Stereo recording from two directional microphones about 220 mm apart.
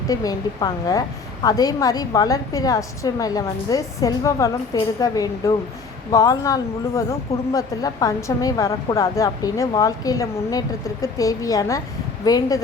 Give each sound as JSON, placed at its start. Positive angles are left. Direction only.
{"t": 0.1, "sound": "speech", "side_deg": 15}